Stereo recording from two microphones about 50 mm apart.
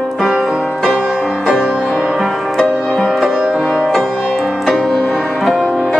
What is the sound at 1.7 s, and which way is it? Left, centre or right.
Music, right.